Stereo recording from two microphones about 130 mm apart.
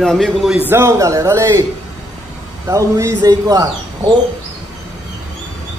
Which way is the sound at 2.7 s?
25° right (ahead or behind).